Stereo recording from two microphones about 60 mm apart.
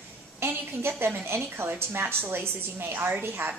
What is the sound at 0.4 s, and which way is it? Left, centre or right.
A woman's voice, right.